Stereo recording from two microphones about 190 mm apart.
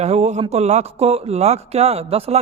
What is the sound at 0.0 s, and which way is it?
Speech, 35° right (ahead or behind).